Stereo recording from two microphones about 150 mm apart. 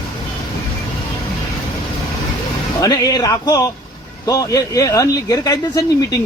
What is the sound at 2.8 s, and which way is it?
Speech, 25° left (ahead or behind).